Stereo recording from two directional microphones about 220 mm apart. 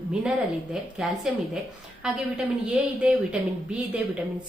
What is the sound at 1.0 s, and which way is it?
A woman's voice, centre (ahead or behind).